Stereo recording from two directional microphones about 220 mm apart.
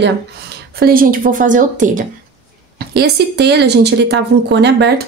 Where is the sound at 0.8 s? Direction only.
40° right (ahead or behind).